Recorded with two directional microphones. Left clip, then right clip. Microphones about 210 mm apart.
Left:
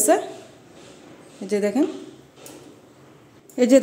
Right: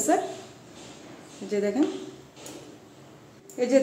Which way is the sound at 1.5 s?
35° left (ahead or behind).